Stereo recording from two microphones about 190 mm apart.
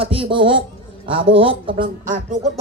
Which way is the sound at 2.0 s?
40° right (ahead or behind).